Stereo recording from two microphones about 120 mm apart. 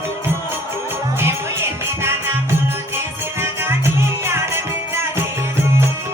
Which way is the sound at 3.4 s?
20° right (ahead or behind).